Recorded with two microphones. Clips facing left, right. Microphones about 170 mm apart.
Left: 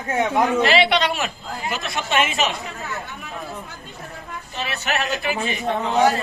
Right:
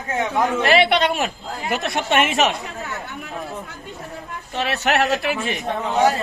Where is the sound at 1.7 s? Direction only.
65° right (ahead or behind).